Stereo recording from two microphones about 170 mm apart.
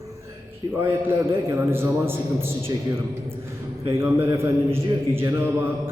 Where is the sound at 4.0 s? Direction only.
15° right (ahead or behind).